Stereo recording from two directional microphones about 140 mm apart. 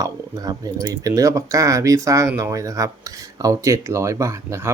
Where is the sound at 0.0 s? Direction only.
25° right (ahead or behind).